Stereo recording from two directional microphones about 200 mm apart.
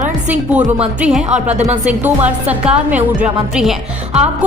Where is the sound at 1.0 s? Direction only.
5° right (ahead or behind).